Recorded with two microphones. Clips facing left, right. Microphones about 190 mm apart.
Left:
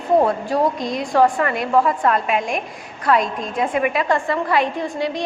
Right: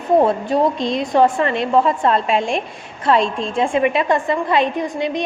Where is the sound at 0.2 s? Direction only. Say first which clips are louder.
Right 2 dB; 25° right (ahead or behind).